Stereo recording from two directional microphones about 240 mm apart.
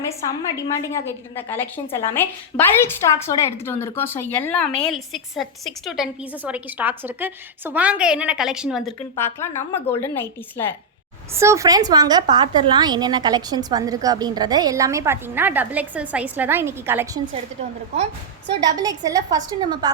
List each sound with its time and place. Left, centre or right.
0.5 s a woman's voice: centre
9.1 s a woman's voice: centre
11.3 s a woman's voice: centre
18.8 s a woman's voice: centre